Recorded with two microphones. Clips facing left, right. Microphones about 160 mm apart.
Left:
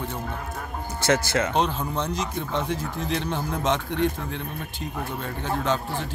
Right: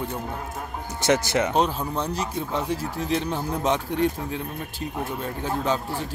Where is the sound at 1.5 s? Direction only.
5° right (ahead or behind).